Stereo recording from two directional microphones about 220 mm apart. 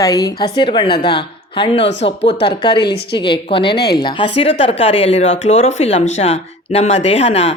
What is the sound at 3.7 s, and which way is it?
Speech, 45° left (ahead or behind).